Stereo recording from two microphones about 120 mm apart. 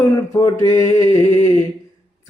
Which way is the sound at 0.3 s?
30° left (ahead or behind).